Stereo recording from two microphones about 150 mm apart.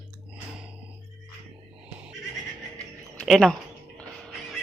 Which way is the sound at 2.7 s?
5° left (ahead or behind).